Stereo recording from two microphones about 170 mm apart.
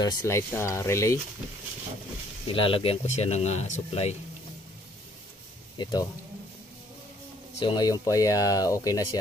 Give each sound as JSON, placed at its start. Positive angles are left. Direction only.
{"t": 0.0, "sound": "speech", "side_deg": 20}
{"t": 2.4, "sound": "speech", "side_deg": 30}
{"t": 5.8, "sound": "speech", "side_deg": 25}
{"t": 7.6, "sound": "speech", "side_deg": 25}